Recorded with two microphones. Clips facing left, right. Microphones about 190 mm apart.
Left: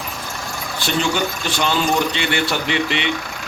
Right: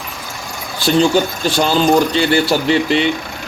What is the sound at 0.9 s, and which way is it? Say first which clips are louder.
Speech: right 8 dB; 35° right (ahead or behind).